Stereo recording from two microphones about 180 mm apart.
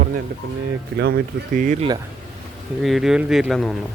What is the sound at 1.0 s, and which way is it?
Speech, 60° right (ahead or behind).